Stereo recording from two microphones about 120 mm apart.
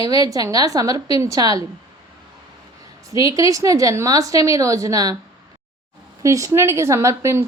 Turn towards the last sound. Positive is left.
turn(degrees=-25)  # may be behind; listen again after turning